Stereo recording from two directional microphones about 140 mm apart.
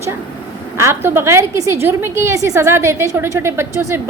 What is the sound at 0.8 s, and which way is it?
A woman's voice, 20° right (ahead or behind).